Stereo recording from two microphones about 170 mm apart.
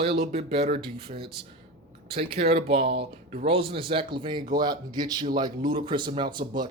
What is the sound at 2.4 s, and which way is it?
Speech, 35° right (ahead or behind).